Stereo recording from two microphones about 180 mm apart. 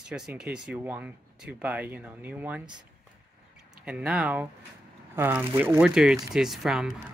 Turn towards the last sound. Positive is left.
turn(degrees=0)  # may be behind; listen again after turning